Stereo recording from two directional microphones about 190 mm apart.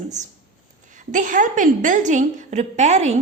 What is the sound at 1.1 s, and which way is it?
A woman's voice, 40° right (ahead or behind).